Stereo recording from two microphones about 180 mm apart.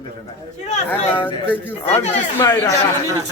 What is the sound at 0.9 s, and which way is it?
Speech, 10° left (ahead or behind).